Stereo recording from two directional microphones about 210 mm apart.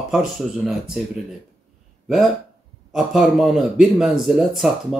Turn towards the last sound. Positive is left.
turn(degrees=0)  # may be behind; listen again after turning